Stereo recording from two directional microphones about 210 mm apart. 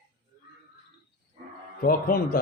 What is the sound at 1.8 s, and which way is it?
Speech, 40° left (ahead or behind).